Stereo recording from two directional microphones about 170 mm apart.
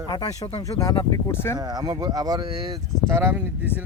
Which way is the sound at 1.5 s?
25° right (ahead or behind).